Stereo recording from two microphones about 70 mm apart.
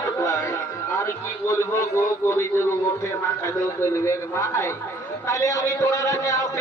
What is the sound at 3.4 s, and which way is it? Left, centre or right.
A man's voice, left.